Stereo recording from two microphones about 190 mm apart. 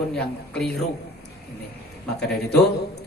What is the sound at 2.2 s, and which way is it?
Speech, 60° left (ahead or behind).